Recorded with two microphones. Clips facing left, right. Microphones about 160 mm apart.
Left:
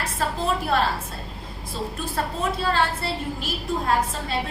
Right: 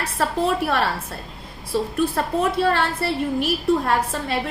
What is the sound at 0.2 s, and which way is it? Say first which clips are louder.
Speech: right 5 dB; 65° right (ahead or behind).